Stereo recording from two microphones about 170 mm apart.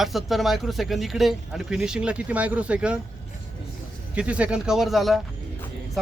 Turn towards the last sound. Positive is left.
turn(degrees=0)  # may be behind; listen again after turning